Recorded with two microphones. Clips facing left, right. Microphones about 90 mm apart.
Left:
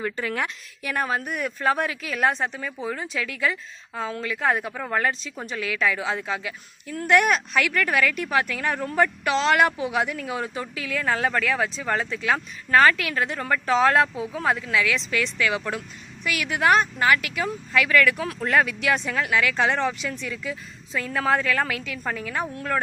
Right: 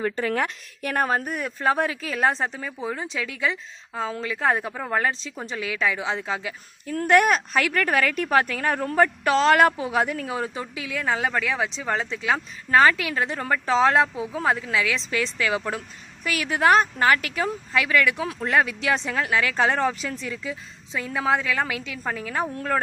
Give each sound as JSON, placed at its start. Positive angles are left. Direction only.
{"t": 0.0, "sound": "speech", "side_deg": -30}